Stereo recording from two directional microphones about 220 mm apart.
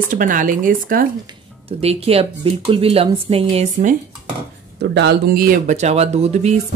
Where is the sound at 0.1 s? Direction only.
40° right (ahead or behind).